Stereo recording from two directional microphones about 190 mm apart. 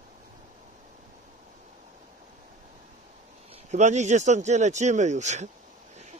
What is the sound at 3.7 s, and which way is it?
Speech, 40° right (ahead or behind).